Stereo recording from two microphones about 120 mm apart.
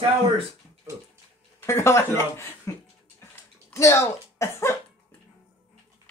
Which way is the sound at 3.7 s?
25° left (ahead or behind).